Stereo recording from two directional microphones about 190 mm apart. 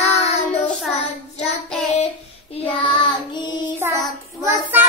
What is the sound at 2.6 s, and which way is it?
Child singing, 25° left (ahead or behind).